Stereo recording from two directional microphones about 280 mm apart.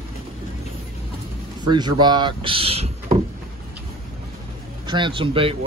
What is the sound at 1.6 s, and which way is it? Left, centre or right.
Speech, centre.